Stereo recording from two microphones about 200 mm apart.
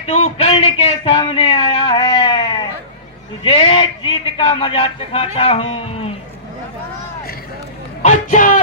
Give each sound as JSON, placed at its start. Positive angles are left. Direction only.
{"t": 0.0, "sound": "a man's voice", "side_deg": 30}
{"t": 8.0, "sound": "speech", "side_deg": 40}